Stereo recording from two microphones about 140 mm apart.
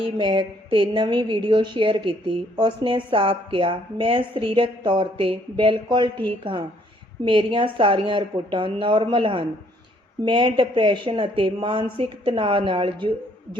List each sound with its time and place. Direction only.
0.0 s a woman's voice: 35° right (ahead or behind)